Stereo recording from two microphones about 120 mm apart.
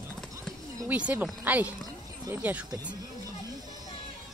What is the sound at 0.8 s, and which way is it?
Speech, 15° right (ahead or behind).